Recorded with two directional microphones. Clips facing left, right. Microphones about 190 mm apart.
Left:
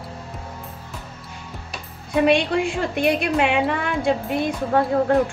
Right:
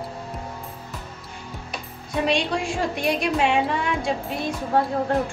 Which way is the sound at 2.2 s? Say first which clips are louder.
Left 5 dB; 60° left (ahead or behind).